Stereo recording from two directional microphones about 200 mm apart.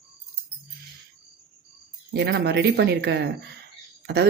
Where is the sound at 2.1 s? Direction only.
55° right (ahead or behind).